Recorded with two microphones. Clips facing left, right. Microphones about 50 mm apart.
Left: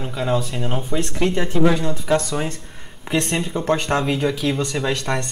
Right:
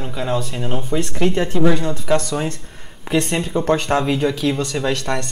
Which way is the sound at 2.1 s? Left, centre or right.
Centre.